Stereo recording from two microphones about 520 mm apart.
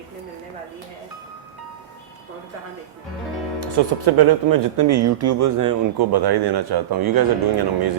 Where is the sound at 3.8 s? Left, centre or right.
Right.